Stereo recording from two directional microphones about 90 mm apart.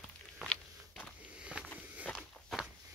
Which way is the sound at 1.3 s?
10° right (ahead or behind).